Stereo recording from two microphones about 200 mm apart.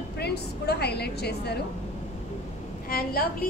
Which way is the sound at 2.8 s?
45° left (ahead or behind).